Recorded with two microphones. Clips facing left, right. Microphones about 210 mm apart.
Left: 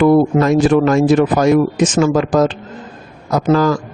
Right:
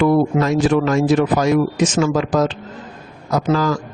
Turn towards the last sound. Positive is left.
turn(degrees=50)  # may be behind; listen again after turning